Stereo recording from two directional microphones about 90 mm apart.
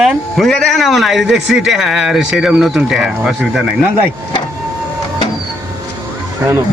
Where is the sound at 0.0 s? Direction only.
Centre (ahead or behind).